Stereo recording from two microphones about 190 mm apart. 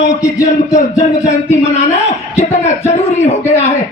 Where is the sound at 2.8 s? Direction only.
35° left (ahead or behind).